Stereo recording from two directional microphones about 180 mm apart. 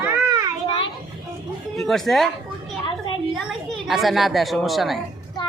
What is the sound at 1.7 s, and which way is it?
Speech, centre (ahead or behind).